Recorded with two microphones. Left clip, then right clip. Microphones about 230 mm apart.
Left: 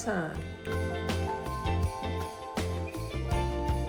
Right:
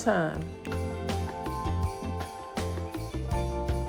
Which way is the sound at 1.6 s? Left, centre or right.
Centre.